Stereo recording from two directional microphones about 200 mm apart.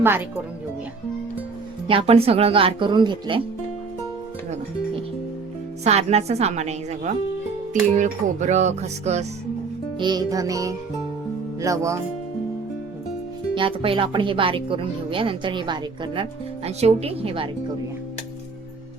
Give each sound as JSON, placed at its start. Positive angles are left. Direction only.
{"t": 1.9, "sound": "speech", "side_deg": -30}
{"t": 5.8, "sound": "a woman's voice", "side_deg": -35}
{"t": 10.0, "sound": "music", "side_deg": -20}
{"t": 13.5, "sound": "a woman's voice", "side_deg": -25}